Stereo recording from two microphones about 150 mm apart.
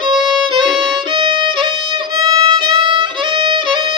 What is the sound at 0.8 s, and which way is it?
Violin, 35° right (ahead or behind).